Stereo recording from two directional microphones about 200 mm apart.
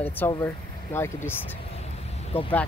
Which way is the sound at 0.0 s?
10° left (ahead or behind).